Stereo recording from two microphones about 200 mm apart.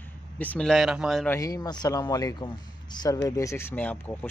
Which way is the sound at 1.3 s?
15° left (ahead or behind).